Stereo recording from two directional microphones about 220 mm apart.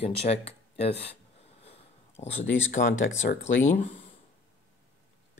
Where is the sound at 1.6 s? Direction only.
30° left (ahead or behind).